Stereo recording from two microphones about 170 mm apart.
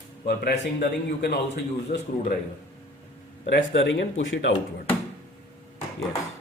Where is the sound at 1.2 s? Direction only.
80° left.